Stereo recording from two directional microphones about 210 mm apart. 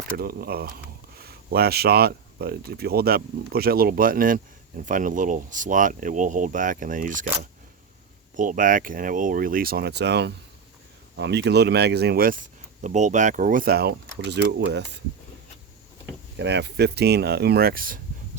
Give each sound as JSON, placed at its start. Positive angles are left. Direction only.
{"t": 0.2, "sound": "speech", "side_deg": -45}
{"t": 8.4, "sound": "speech", "side_deg": -40}
{"t": 16.4, "sound": "speech", "side_deg": -55}